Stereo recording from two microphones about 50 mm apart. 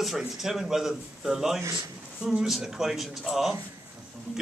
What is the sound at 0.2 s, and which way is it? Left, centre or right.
A man's voice, centre.